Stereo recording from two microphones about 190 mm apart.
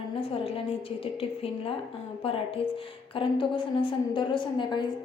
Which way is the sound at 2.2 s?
30° left (ahead or behind).